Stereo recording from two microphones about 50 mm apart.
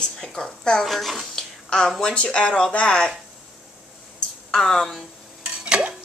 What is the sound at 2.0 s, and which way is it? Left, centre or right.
A woman's voice, centre.